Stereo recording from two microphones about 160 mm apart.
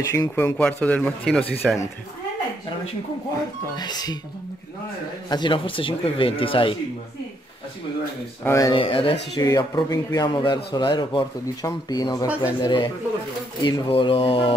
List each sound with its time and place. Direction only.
0.0 s speech: 20° left (ahead or behind)
0.6 s speech: 10° left (ahead or behind)
3.7 s speech: 25° left (ahead or behind)
5.3 s speech: 30° left (ahead or behind)
8.5 s speech: 20° left (ahead or behind)
11.4 s speech: 20° left (ahead or behind)